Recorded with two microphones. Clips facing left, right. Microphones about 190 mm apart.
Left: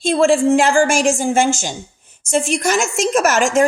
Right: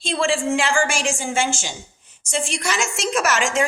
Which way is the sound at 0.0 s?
45° left (ahead or behind).